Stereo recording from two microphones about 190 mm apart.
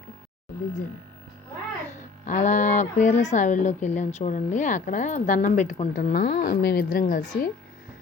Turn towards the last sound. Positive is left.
turn(degrees=40)  # may be behind; listen again after turning